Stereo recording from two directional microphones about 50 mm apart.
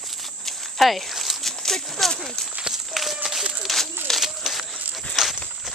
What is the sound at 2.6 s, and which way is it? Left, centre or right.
Run, centre.